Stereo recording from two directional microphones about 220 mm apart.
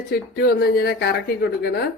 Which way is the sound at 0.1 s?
45° left (ahead or behind).